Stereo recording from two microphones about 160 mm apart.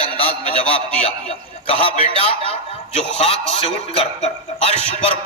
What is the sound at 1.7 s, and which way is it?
Speech, 35° left (ahead or behind).